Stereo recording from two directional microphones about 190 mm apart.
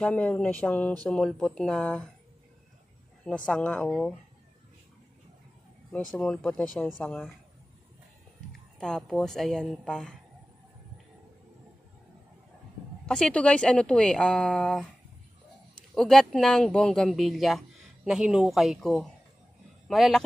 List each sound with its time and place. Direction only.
0.0 s speech: 5° left (ahead or behind)
3.3 s speech: 5° left (ahead or behind)
6.1 s speech: 5° left (ahead or behind)
8.7 s speech: 5° left (ahead or behind)
13.0 s speech: 5° left (ahead or behind)
15.9 s speech: centre (ahead or behind)